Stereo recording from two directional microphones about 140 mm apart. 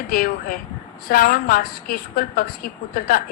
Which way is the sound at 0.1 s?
90° left.